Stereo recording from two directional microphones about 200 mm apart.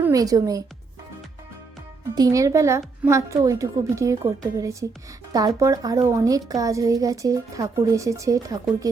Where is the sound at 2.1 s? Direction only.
20° right (ahead or behind).